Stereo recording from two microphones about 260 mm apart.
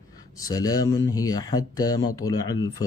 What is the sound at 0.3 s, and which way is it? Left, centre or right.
Speech, centre.